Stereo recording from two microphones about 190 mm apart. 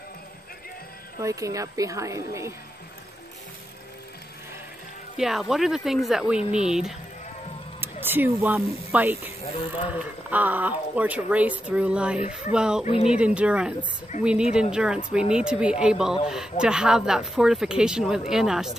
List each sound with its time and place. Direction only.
1.2 s speech: 15° right (ahead or behind)
5.1 s speech: centre (ahead or behind)
10.3 s speech: 10° right (ahead or behind)
12.8 s speech: 30° left (ahead or behind)
13.1 s speech: 5° right (ahead or behind)